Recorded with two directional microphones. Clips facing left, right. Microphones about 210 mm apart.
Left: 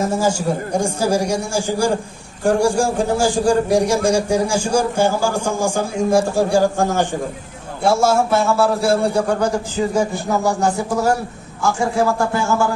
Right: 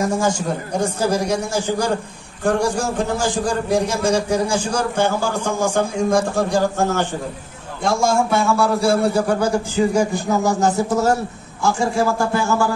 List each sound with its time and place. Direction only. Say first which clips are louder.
0.0 s a man's voice: left 1 dB; 5° left (ahead or behind)
9.8 s speech: right 2 dB; 15° right (ahead or behind)